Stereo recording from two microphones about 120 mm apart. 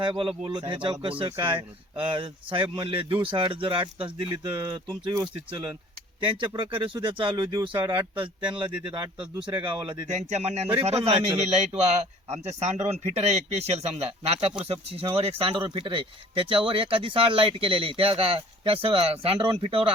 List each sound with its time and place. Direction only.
0.0 s speech: 45° right (ahead or behind)
10.1 s speech: 75° right (ahead or behind); by 19.9 s 50° right (ahead or behind)